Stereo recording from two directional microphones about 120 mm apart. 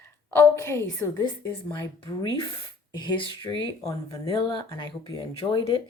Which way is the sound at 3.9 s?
30° left (ahead or behind).